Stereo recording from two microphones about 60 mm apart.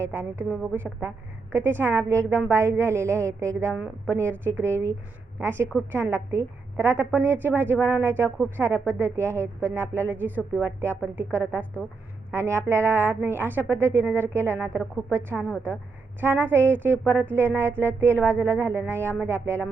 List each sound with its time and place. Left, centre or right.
0.0 s a woman's voice: right
1.5 s a woman's voice: right
4.1 s a woman's voice: right
12.3 s a woman's voice: right